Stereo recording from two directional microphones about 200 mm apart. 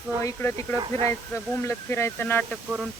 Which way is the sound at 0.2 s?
15° left (ahead or behind).